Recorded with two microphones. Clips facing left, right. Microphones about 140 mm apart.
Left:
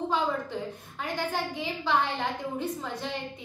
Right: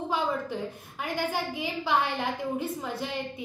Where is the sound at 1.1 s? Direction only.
10° right (ahead or behind).